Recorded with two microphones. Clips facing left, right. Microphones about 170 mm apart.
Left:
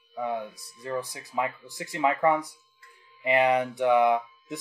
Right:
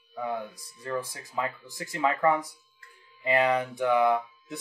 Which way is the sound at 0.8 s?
15° left (ahead or behind).